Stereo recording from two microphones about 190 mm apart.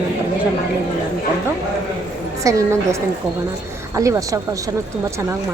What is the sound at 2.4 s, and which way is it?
Speech, 15° right (ahead or behind).